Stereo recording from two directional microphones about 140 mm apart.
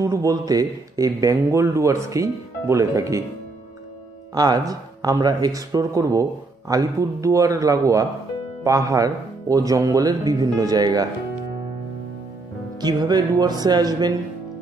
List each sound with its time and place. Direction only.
0.0 s speech: 25° right (ahead or behind)
4.4 s speech: 30° right (ahead or behind)
12.8 s speech: 30° right (ahead or behind)